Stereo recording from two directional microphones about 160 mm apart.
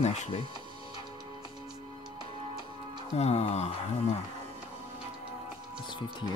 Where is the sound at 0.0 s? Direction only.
45° left (ahead or behind).